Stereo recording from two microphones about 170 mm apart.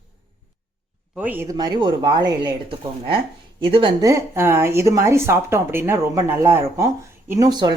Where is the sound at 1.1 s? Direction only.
10° right (ahead or behind); by 3.9 s 30° right (ahead or behind).